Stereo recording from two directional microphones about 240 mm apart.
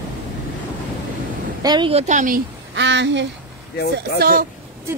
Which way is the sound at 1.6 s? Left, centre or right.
Centre.